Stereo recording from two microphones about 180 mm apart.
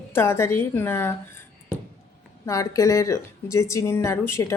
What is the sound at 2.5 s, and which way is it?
Speech, 15° left (ahead or behind).